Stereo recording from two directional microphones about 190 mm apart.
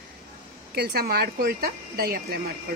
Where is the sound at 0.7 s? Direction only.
55° right (ahead or behind).